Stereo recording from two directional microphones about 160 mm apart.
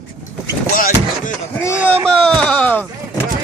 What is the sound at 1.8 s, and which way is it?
Speech, 10° right (ahead or behind).